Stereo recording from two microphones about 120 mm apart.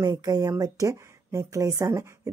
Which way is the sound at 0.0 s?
30° right (ahead or behind).